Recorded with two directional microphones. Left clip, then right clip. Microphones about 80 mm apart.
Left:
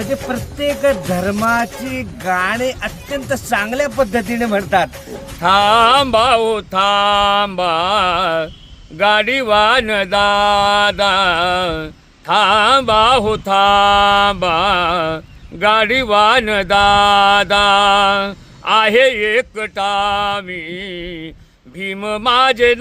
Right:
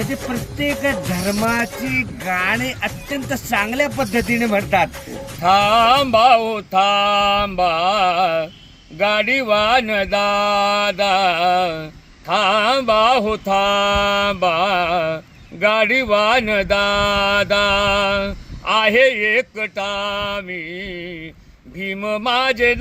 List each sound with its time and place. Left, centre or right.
0.6 s speech: left
3.2 s speech: left
4.0 s speech: left
5.4 s a sound: left
12.3 s speech: left